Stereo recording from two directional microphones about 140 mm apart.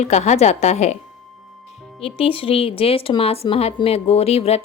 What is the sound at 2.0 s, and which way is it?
Speech, 40° left (ahead or behind).